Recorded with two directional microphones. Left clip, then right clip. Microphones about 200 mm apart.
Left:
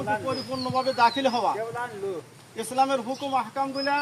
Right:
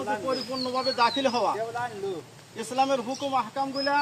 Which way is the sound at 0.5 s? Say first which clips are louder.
Left 4 dB; 35° left (ahead or behind).